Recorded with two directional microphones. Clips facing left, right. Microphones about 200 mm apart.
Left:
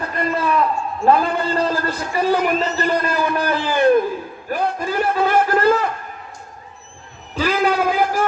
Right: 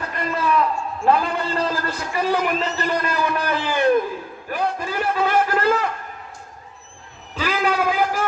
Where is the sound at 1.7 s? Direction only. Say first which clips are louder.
Left 3 dB; 35° left (ahead or behind).